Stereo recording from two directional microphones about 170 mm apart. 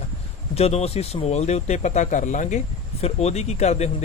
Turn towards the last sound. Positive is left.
turn(degrees=40)  # may be behind; listen again after turning